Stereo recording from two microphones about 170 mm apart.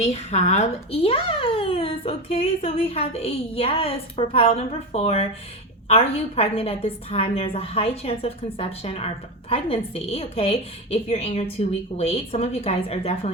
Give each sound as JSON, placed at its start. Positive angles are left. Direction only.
{"t": 0.0, "sound": "speech", "side_deg": 40}